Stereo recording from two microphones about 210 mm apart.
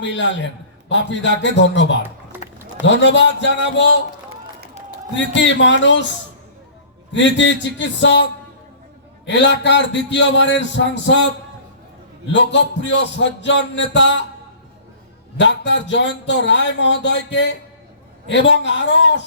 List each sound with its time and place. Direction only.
0.0 s speech: 60° left (ahead or behind)
2.3 s a sound: 10° right (ahead or behind)
2.8 s speech: 60° left (ahead or behind)
5.1 s speech: 60° left (ahead or behind)
7.1 s speech: 60° left (ahead or behind)
12.3 s speech: 60° left (ahead or behind)
15.4 s speech: 60° left (ahead or behind)